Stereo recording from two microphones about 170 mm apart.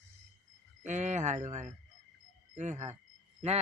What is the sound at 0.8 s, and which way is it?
Speech, 45° right (ahead or behind).